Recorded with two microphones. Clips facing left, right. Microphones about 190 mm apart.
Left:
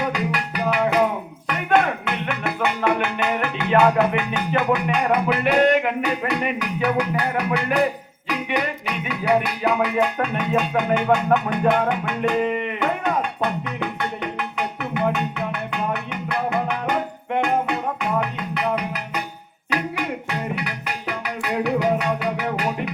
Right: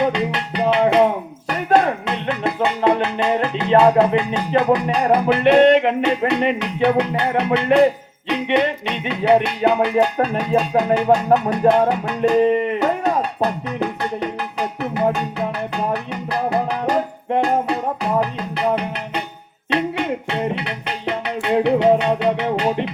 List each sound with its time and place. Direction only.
0.0 s music: 25° right (ahead or behind)